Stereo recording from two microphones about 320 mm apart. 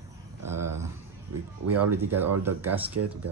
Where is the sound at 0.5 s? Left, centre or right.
Centre.